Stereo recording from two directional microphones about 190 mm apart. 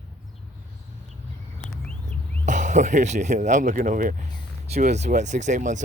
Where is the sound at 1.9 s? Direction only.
5° left (ahead or behind).